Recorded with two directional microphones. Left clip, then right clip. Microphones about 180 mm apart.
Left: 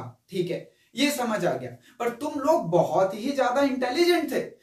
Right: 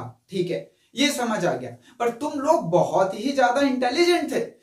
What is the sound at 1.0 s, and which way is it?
Speech, 10° left (ahead or behind).